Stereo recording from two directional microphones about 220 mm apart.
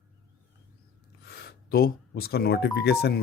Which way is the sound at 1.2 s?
45° left (ahead or behind).